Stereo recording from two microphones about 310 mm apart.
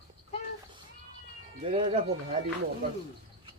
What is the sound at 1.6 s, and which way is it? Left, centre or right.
Speech, centre.